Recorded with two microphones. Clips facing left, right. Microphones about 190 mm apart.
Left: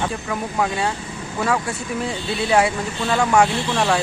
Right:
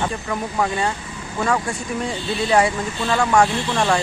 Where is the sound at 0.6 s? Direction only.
5° left (ahead or behind).